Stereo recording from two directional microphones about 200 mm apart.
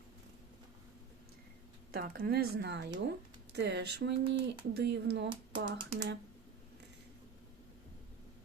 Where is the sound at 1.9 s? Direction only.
50° right (ahead or behind).